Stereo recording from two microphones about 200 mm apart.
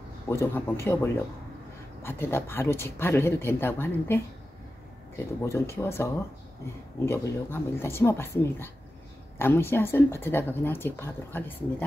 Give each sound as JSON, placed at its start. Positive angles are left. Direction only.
{"t": 0.3, "sound": "speech", "side_deg": 15}
{"t": 7.1, "sound": "speech", "side_deg": 10}